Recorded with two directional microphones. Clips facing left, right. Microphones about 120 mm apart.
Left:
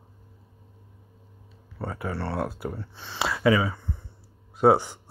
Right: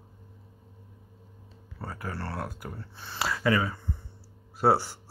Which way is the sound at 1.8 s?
20° left (ahead or behind).